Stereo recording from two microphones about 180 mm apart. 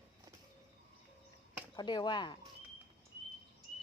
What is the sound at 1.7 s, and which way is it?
Speech, 25° left (ahead or behind).